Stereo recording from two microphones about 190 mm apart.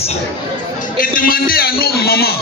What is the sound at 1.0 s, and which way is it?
A man's voice, 50° left (ahead or behind).